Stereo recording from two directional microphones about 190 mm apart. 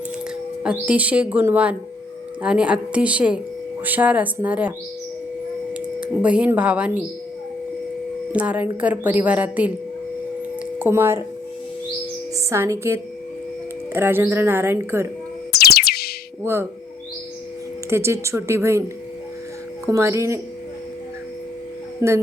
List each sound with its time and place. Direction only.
0.6 s speech: 5° right (ahead or behind)
5.7 s speech: 5° right (ahead or behind)
8.3 s speech: 5° right (ahead or behind)
10.8 s speech: 10° right (ahead or behind)
12.5 s speech: 15° right (ahead or behind)
15.5 s music: 55° left (ahead or behind)
16.4 s speech: 15° right (ahead or behind)
17.8 s speech: 15° right (ahead or behind)
19.9 s speech: 15° right (ahead or behind)